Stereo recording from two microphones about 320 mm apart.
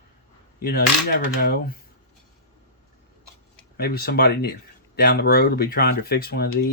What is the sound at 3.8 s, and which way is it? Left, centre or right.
Speech, left.